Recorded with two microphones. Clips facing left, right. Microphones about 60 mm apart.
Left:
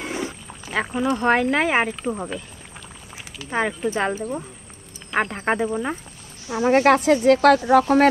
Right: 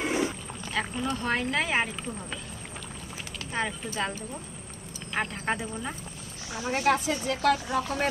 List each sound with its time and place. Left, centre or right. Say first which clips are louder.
0.0 s a sound: right 1 dB; centre
0.7 s speech: left 8 dB; left
3.4 s speech: left 9 dB; left
5.1 s speech: left 8 dB; left
6.5 s speech: left 10 dB; left